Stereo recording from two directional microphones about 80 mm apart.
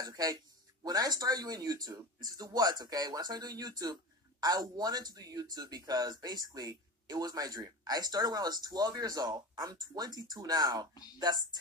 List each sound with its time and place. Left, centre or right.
0.0 s speech: right